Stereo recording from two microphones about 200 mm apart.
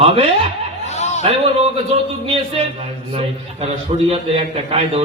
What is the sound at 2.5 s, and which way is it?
A man's voice, 30° right (ahead or behind).